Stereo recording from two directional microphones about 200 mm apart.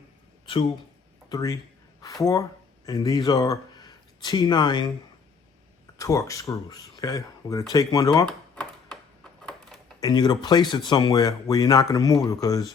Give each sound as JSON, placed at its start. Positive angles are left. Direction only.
{"t": 1.3, "sound": "speech", "side_deg": 15}
{"t": 6.0, "sound": "speech", "side_deg": 15}
{"t": 8.3, "sound": "computer keyboard", "side_deg": 5}
{"t": 10.0, "sound": "speech", "side_deg": 20}